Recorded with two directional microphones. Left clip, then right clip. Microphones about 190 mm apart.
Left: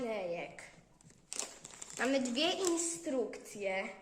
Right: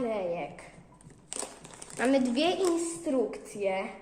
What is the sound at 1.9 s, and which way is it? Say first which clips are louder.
A woman's voice: right 7 dB; 10° left (ahead or behind).